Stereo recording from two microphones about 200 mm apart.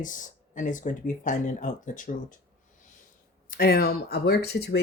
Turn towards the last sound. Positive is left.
turn(degrees=55)  # may be behind; listen again after turning